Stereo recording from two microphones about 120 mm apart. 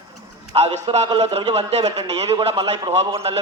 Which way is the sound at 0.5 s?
60° right (ahead or behind).